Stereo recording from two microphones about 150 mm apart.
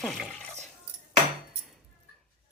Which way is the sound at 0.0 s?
Centre (ahead or behind).